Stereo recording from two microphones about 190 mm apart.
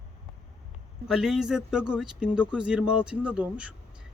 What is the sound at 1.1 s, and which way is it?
Speech, centre (ahead or behind).